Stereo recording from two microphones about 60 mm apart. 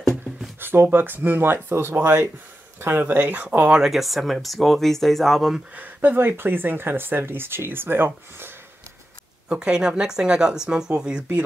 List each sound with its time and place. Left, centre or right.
0.6 s speech: right; by 3.8 s centre
3.8 s speech: centre
5.8 s speech: right
9.5 s speech: centre